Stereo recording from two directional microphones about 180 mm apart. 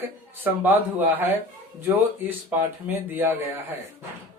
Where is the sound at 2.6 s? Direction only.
10° right (ahead or behind).